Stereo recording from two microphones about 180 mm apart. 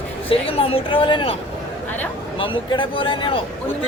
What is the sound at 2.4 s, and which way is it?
Speech, 30° left (ahead or behind).